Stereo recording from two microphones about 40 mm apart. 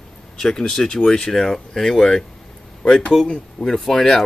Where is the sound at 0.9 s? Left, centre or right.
Left.